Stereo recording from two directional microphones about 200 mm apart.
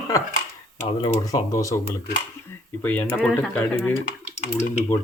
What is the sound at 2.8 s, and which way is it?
Speech, 10° left (ahead or behind).